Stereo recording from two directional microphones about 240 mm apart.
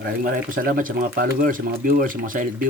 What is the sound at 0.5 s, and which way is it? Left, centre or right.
Speech, right.